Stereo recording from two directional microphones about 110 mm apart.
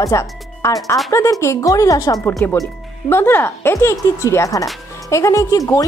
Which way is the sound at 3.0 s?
20° left (ahead or behind).